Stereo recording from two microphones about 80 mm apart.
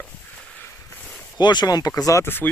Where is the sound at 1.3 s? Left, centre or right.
Left.